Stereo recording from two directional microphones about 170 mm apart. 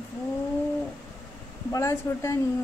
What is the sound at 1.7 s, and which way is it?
Speech, 20° left (ahead or behind).